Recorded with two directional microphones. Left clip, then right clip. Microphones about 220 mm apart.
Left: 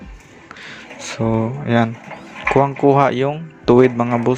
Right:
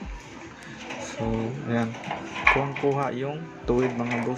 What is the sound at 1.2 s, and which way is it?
Speech, 35° left (ahead or behind).